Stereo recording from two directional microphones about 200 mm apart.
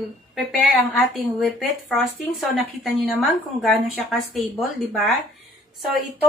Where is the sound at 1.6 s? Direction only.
Centre (ahead or behind).